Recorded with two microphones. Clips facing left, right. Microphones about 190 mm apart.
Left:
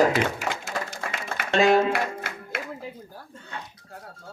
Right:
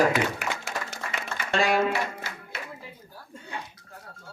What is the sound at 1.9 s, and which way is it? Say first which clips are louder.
Music: left 2 dB; 55° left (ahead or behind).